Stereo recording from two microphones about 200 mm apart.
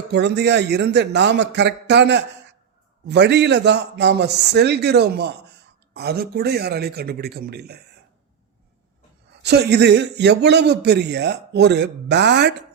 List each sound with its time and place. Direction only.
0.1 s a man's voice: 60° right (ahead or behind)
9.4 s a man's voice: 55° right (ahead or behind)